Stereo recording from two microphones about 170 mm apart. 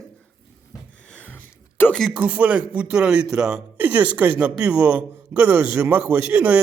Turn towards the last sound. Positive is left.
turn(degrees=-10)  # may be behind; listen again after turning